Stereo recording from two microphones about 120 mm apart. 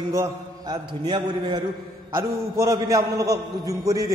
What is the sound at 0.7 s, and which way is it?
Speech, 40° right (ahead or behind).